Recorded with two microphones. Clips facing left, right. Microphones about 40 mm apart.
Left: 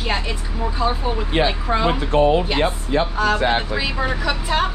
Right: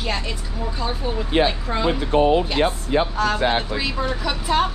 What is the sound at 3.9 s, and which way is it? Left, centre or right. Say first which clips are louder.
Speech: left 2 dB; left.